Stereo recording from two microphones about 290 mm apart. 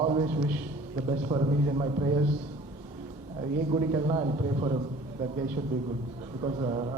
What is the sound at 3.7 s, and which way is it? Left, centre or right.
A man's voice, centre.